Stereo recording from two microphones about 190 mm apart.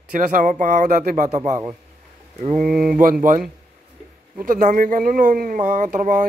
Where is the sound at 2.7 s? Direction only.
45° right (ahead or behind).